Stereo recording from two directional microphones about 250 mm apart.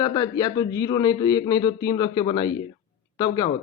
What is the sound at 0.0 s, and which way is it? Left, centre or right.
Speech, centre.